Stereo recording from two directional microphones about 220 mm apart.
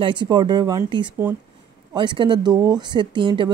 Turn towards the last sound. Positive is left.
turn(degrees=-20)  # may be behind; listen again after turning